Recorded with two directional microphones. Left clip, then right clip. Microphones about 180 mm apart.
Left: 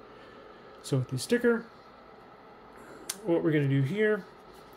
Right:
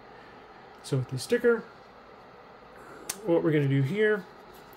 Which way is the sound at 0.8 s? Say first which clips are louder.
Even; 15° left (ahead or behind).